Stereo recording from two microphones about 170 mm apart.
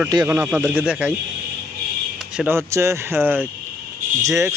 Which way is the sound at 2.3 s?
10° right (ahead or behind).